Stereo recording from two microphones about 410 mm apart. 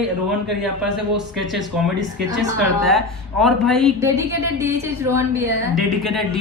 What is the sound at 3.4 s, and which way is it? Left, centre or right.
A woman's voice, centre.